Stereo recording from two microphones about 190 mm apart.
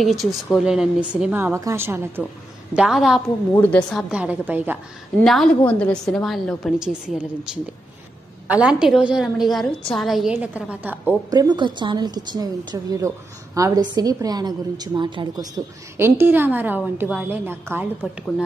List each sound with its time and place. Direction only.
0.0 s a woman's voice: centre (ahead or behind)
4.1 s speech: 5° right (ahead or behind)
5.2 s a woman's voice: centre (ahead or behind)
11.2 s a woman's voice: 20° right (ahead or behind)
16.0 s speech: 10° right (ahead or behind)